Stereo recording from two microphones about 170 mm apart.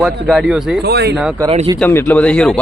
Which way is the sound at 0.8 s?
75° right (ahead or behind).